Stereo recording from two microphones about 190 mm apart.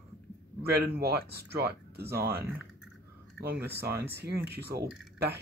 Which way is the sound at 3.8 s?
55° right (ahead or behind).